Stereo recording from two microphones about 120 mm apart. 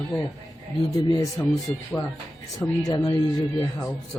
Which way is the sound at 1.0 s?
30° left (ahead or behind).